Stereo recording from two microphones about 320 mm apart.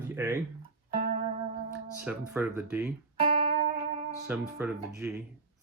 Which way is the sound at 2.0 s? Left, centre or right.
Centre.